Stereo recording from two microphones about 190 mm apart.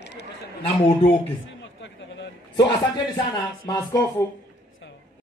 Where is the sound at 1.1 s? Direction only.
70° left (ahead or behind).